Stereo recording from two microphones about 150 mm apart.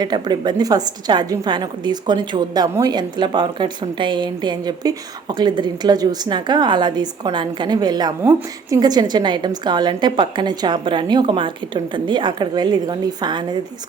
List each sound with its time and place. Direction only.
0.0 s a woman's voice: 30° right (ahead or behind)